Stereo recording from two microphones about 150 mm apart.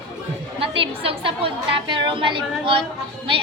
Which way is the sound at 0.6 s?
35° right (ahead or behind).